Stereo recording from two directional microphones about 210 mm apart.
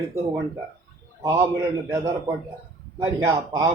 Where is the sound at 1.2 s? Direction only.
15° right (ahead or behind).